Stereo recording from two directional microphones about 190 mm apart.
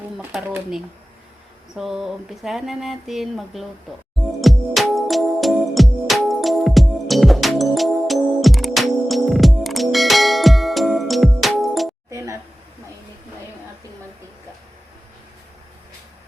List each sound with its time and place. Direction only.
1.7 s speech: 5° right (ahead or behind)
4.4 s music: centre (ahead or behind)
12.1 s a sound: 15° right (ahead or behind)